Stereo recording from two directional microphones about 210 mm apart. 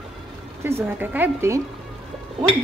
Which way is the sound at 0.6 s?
10° right (ahead or behind).